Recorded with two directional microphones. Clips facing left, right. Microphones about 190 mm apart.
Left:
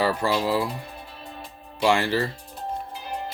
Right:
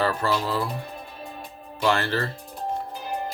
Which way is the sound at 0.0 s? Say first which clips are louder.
Left 1 dB; 10° left (ahead or behind).